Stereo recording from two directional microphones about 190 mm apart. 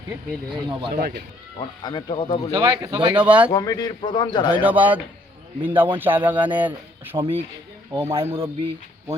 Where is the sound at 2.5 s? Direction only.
20° right (ahead or behind).